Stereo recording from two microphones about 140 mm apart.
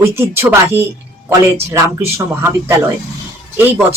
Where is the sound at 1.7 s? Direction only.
20° right (ahead or behind).